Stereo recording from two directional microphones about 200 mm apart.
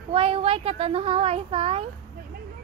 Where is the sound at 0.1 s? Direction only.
30° right (ahead or behind).